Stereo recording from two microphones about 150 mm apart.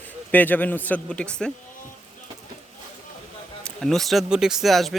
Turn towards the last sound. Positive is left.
turn(degrees=0)  # may be behind; listen again after turning